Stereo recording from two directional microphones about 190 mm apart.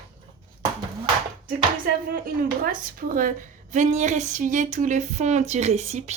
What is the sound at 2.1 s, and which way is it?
Speech, 50° right (ahead or behind).